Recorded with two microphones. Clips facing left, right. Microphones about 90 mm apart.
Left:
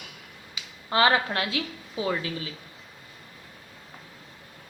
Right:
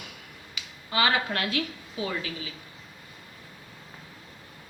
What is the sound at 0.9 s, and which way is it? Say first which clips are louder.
Speech: left 4 dB; 40° left (ahead or behind).